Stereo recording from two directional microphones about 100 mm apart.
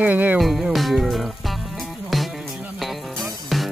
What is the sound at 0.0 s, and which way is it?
Speech, 15° right (ahead or behind).